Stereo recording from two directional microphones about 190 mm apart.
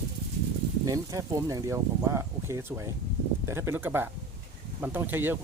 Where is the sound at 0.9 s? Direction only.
15° right (ahead or behind).